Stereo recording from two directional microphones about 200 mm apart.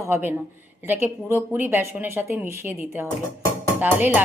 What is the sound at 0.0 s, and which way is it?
A woman's voice, 10° right (ahead or behind).